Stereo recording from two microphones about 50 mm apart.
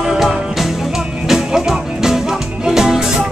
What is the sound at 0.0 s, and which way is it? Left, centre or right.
Music, centre.